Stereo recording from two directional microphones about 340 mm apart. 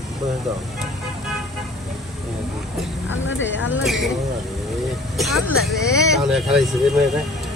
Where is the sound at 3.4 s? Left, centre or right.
Left.